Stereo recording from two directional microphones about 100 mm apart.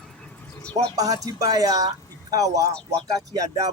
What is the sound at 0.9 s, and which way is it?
Speech, 35° right (ahead or behind).